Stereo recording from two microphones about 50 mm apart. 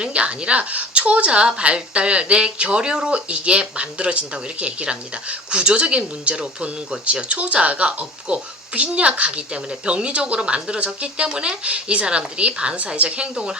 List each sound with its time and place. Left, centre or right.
0.0 s a woman's voice: right